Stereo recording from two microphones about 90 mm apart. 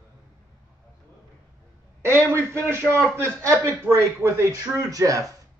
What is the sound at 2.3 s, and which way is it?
A man's voice, 30° right (ahead or behind).